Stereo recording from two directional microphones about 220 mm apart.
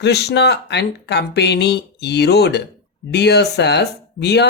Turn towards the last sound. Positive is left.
turn(degrees=50)  # may be behind; listen again after turning